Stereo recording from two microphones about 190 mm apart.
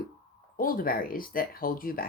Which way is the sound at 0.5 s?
50° left (ahead or behind).